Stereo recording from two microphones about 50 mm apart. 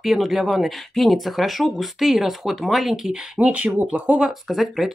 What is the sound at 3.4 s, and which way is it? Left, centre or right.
Speech, right.